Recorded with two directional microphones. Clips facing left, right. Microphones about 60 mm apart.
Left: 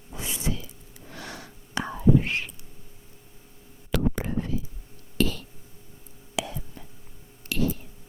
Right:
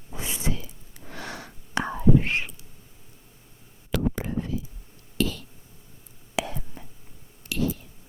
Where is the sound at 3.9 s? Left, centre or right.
Left.